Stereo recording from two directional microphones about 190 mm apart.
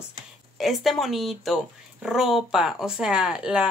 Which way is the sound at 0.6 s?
Centre (ahead or behind).